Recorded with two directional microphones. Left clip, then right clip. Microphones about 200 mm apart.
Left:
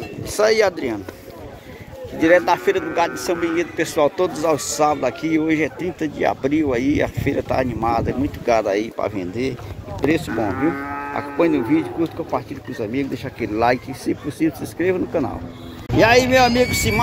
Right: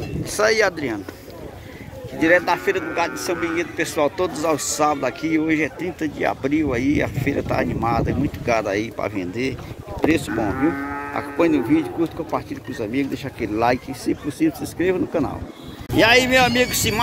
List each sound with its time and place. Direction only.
0.2 s speech: 5° left (ahead or behind)
2.1 s a man's voice: 10° left (ahead or behind)
10.5 s speech: 50° left (ahead or behind)
11.1 s speech: centre (ahead or behind)